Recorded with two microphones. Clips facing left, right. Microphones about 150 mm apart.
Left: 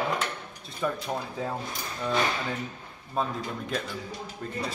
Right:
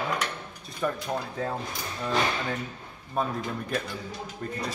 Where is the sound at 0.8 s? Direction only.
5° left (ahead or behind).